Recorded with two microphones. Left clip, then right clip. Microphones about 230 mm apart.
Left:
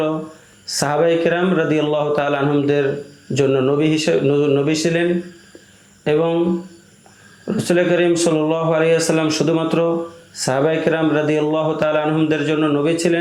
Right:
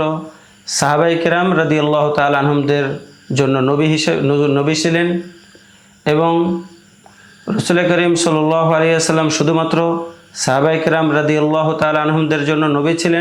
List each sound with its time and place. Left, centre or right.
0.6 s speech: right
6.1 s speech: right
7.4 s speech: right